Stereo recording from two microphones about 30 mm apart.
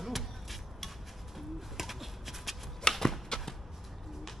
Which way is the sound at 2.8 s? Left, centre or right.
Left.